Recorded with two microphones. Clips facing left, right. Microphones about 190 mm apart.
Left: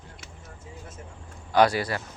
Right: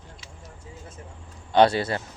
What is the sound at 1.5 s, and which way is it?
Speech, 25° right (ahead or behind).